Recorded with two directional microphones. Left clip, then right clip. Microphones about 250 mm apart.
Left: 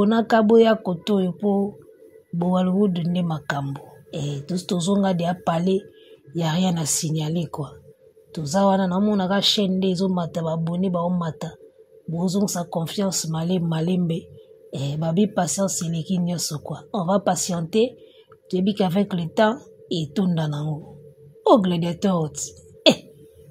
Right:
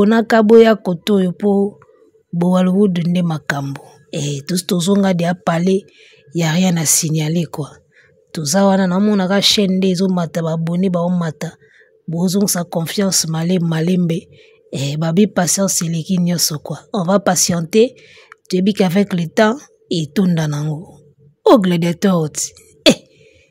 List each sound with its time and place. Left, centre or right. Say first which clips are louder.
0.0 s speech: right 6 dB; right